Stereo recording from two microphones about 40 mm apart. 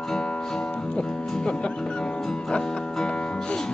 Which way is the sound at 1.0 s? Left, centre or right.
Left.